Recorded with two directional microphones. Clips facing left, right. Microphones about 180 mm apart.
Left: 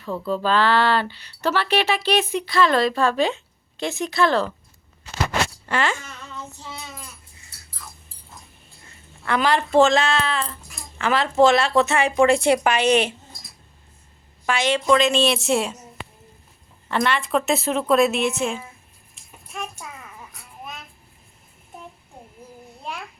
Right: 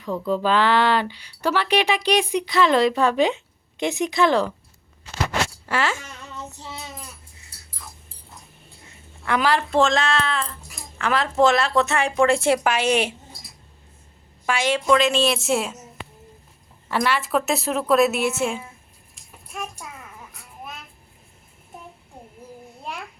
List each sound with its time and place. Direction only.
0.3 s speech: 15° right (ahead or behind)
5.6 s speech: 5° right (ahead or behind)
6.3 s child singing: 20° right (ahead or behind)
9.2 s speech: 10° right (ahead or behind)
14.4 s speech: 10° right (ahead or behind)
16.9 s speech: 5° right (ahead or behind)